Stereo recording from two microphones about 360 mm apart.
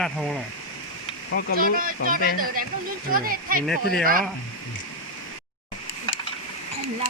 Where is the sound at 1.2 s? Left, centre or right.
Left.